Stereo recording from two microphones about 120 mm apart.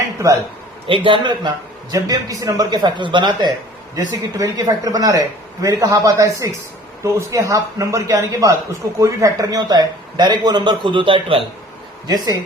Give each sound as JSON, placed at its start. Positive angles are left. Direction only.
{"t": 0.2, "sound": "speech", "side_deg": -25}
{"t": 0.9, "sound": "a man's voice", "side_deg": -45}
{"t": 1.9, "sound": "speech", "side_deg": -30}
{"t": 12.0, "sound": "speech", "side_deg": -30}